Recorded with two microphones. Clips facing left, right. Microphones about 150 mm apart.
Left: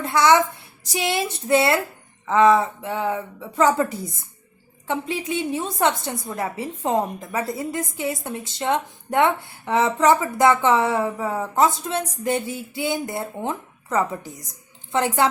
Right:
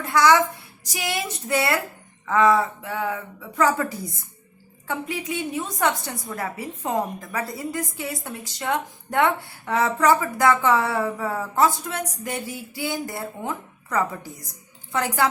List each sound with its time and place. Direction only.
0.0 s a woman's voice: 25° left (ahead or behind)